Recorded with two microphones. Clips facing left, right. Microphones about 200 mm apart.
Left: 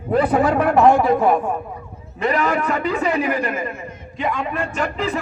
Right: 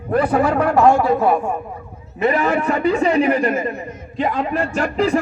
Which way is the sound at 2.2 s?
20° right (ahead or behind).